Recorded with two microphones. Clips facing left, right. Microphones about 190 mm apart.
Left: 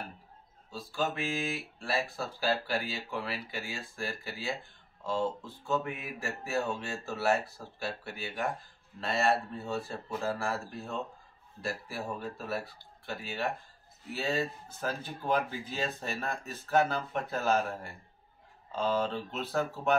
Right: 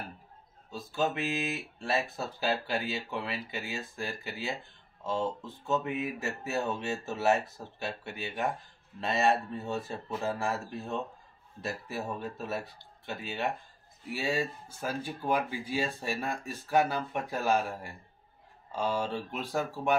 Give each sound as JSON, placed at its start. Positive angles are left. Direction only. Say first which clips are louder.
{"t": 0.7, "sound": "speech", "louder": "right 2 dB", "side_deg": -20}
{"t": 5.7, "sound": "speech", "louder": "right 2 dB", "side_deg": -20}